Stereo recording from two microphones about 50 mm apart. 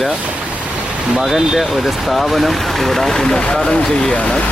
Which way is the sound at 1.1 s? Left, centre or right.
Centre.